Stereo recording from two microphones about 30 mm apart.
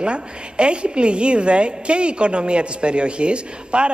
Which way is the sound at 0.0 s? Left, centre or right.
Right.